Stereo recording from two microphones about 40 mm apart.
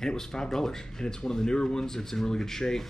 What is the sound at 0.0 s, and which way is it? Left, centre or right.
Speech, centre.